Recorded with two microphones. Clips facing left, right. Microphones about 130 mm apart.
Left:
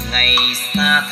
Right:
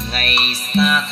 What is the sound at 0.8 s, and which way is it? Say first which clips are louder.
Music: right 2 dB; 20° right (ahead or behind).